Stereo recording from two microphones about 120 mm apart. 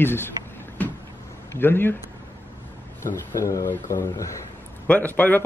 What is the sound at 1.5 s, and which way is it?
Speech, 20° left (ahead or behind).